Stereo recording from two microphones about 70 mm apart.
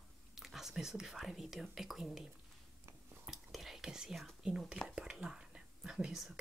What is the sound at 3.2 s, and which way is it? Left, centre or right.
Whispering, centre.